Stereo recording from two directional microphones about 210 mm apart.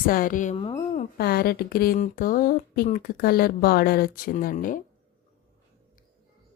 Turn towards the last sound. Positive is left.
turn(degrees=40)  # may be behind; listen again after turning